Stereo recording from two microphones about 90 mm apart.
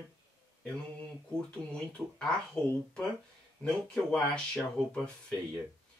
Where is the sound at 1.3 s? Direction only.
10° left (ahead or behind).